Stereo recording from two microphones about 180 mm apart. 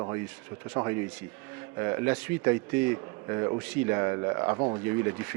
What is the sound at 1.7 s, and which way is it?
A man's voice, 15° right (ahead or behind).